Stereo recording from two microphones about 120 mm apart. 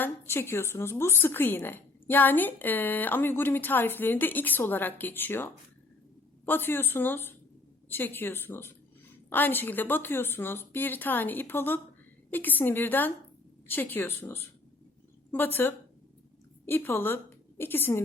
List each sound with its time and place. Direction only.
0.0 s a woman's voice: 20° left (ahead or behind)